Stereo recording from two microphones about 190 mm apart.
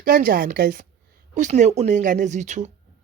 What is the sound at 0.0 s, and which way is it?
Speech, 50° right (ahead or behind).